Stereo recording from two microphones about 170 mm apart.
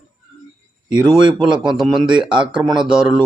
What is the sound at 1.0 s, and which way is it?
Speech, 25° right (ahead or behind).